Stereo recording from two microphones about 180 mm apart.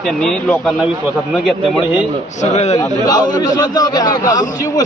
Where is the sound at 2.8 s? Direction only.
20° left (ahead or behind).